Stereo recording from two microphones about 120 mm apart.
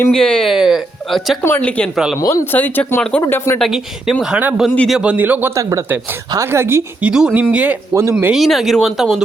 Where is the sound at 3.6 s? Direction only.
5° right (ahead or behind).